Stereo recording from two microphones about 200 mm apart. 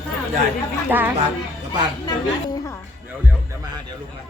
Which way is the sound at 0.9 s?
10° right (ahead or behind).